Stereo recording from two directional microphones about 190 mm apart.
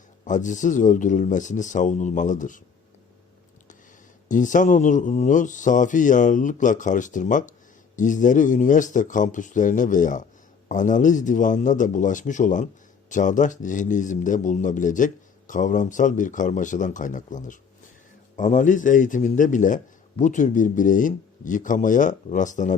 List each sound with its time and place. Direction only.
0.3 s a man's voice: 40° left (ahead or behind)
4.3 s a man's voice: 40° left (ahead or behind)